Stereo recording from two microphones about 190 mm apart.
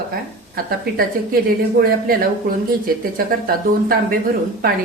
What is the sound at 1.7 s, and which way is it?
Speech, 50° right (ahead or behind).